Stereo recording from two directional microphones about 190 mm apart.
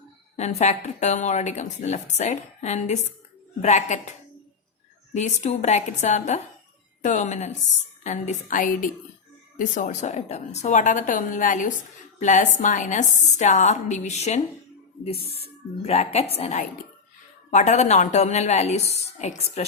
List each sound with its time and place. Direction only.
0.3 s a woman's voice: 35° left (ahead or behind)
5.1 s a woman's voice: 40° left (ahead or behind)
15.8 s a woman's voice: 35° left (ahead or behind)